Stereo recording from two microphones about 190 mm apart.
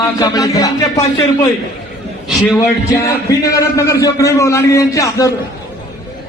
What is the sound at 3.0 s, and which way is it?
A man's voice, 20° left (ahead or behind).